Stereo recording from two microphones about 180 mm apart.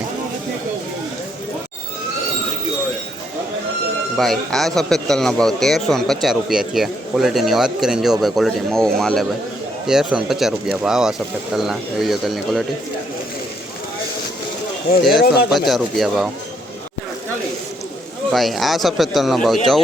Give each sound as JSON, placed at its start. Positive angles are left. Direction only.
{"t": 4.2, "sound": "a man's voice", "side_deg": 0}
{"t": 15.1, "sound": "speech", "side_deg": 60}
{"t": 15.4, "sound": "a man's voice", "side_deg": 0}
{"t": 18.3, "sound": "a man's voice", "side_deg": 0}